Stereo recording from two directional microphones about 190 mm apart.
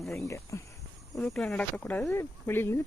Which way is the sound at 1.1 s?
5° left (ahead or behind).